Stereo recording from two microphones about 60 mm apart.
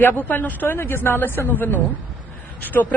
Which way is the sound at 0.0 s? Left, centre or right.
Left.